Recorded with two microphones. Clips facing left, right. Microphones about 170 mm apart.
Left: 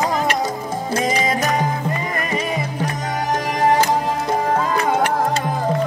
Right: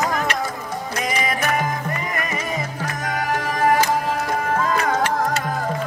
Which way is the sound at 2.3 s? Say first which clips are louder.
Left 4 dB; 15° left (ahead or behind).